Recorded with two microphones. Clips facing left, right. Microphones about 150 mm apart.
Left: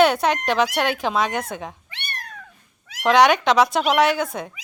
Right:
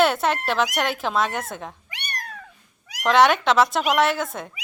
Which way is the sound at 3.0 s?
Centre (ahead or behind).